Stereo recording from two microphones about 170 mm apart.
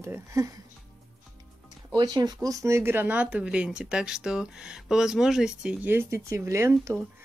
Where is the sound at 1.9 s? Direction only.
25° right (ahead or behind).